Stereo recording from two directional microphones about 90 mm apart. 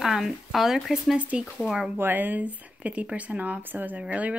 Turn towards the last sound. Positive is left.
turn(degrees=-15)  # may be behind; listen again after turning